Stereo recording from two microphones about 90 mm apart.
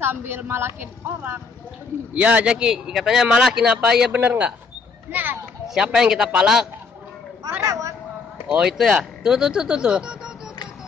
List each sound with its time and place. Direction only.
0.0 s a woman's voice: 25° right (ahead or behind)
2.1 s a woman's voice: 15° right (ahead or behind)
5.8 s speech: 10° right (ahead or behind)
7.6 s vehicle: 35° right (ahead or behind)
8.5 s speech: 10° right (ahead or behind)